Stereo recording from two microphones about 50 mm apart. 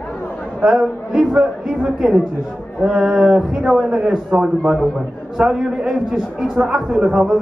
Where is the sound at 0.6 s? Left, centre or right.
Centre.